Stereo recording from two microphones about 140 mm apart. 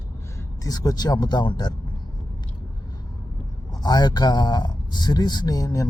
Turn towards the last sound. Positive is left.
turn(degrees=25)  # may be behind; listen again after turning